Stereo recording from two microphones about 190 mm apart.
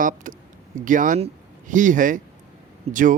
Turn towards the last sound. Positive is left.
turn(degrees=-45)  # may be behind; listen again after turning